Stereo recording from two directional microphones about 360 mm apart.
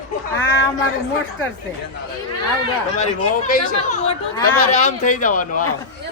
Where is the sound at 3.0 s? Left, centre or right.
Left.